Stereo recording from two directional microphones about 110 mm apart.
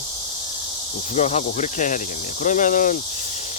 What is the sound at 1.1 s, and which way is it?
Speech, 90° left.